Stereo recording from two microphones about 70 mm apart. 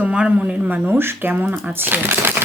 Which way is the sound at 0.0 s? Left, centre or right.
Centre.